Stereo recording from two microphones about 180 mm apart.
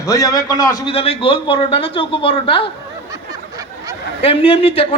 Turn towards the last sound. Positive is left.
turn(degrees=30)  # may be behind; listen again after turning